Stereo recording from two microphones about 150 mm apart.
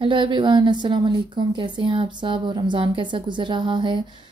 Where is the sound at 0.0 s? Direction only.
35° right (ahead or behind).